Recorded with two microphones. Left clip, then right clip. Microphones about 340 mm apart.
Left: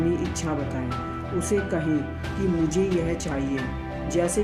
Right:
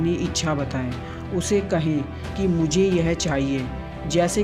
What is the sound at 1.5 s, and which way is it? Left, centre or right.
Speech, right.